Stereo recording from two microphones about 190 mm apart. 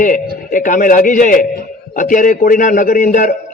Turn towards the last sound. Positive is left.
turn(degrees=45)  # may be behind; listen again after turning